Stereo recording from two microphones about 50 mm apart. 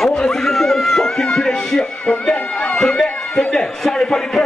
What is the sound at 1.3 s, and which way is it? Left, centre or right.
Music, centre.